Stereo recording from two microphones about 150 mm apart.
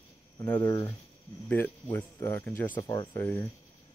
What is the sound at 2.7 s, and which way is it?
Speech, 25° left (ahead or behind).